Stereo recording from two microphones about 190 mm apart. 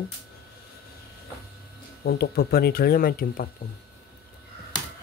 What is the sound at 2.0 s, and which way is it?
Speech, 55° left (ahead or behind).